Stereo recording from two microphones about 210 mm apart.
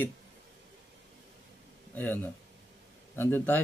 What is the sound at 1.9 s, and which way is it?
Speech, 10° left (ahead or behind).